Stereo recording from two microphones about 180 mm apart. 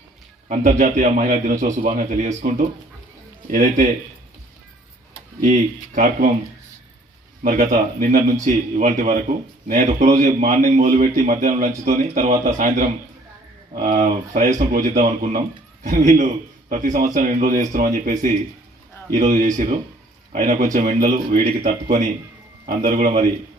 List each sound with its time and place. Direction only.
0.4 s a man's voice: 45° right (ahead or behind)
5.4 s a man's voice: 45° right (ahead or behind)
7.4 s a man's voice: 50° right (ahead or behind)